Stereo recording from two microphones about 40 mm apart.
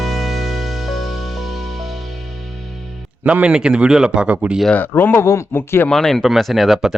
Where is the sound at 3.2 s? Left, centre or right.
Right.